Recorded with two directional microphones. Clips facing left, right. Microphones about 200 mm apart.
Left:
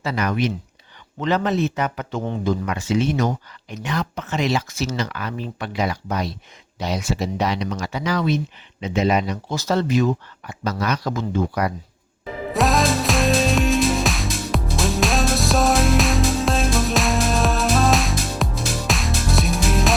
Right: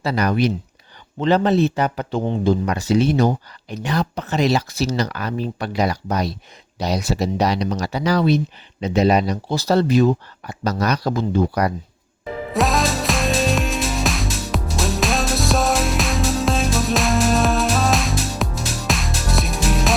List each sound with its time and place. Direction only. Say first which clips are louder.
0.0 s speech: right 3 dB; 35° right (ahead or behind)
12.5 s music: left 1 dB; centre (ahead or behind)